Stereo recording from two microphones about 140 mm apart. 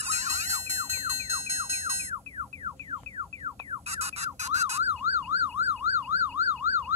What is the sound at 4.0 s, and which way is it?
Emergency vehicle, 50° right (ahead or behind).